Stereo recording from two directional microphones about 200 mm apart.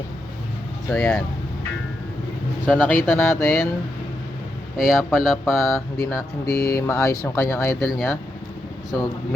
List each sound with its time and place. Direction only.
0.9 s speech: 5° left (ahead or behind)
2.6 s speech: 5° right (ahead or behind)
2.9 s speech: 10° left (ahead or behind)
4.8 s speech: centre (ahead or behind)
6.0 s speech: 15° left (ahead or behind)
7.9 s speech: centre (ahead or behind)